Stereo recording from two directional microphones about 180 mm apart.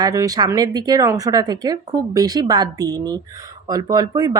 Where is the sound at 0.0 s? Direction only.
20° right (ahead or behind).